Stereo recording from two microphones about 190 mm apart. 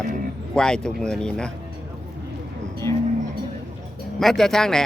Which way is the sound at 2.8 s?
15° left (ahead or behind).